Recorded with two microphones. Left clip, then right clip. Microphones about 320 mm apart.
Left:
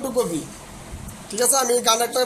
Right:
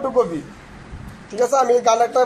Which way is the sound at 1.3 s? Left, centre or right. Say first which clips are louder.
Right 4 dB; centre.